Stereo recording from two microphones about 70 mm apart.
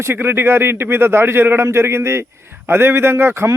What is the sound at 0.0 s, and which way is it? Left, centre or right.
A man's voice, right.